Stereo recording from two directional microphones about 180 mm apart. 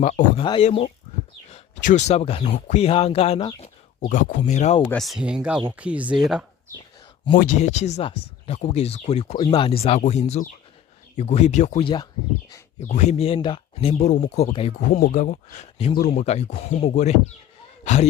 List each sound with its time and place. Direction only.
0.0 s speech: 40° left (ahead or behind)
0.4 s speech: 30° left (ahead or behind)
4.1 s speech: 45° left (ahead or behind)
4.9 s speech: centre (ahead or behind)
7.3 s speech: 45° left (ahead or behind)
14.1 s speech: 45° left (ahead or behind)